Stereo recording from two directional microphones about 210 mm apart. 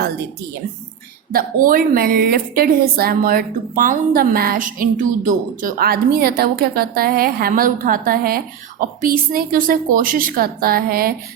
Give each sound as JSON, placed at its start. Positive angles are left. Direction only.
{"t": 1.3, "sound": "a woman's voice", "side_deg": -45}